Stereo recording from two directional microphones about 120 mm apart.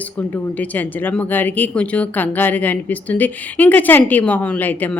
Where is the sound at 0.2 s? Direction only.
15° left (ahead or behind).